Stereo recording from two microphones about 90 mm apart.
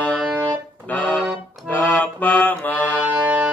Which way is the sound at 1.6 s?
15° left (ahead or behind).